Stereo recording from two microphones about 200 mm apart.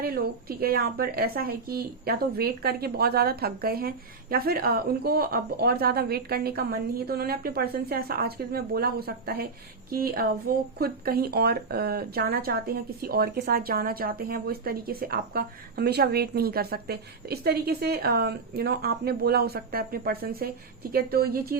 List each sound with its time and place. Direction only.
0.0 s speech: 50° right (ahead or behind)